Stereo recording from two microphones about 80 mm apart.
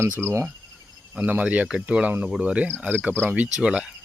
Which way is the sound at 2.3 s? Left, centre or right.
Centre.